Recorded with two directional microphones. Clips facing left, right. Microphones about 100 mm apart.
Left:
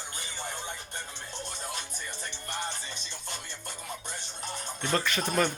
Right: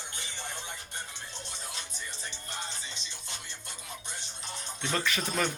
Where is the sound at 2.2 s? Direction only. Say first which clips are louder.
Left 5 dB; 55° left (ahead or behind).